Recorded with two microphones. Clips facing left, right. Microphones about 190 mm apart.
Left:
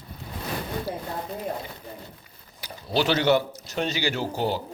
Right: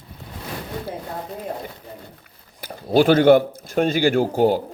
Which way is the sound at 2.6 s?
50° right (ahead or behind).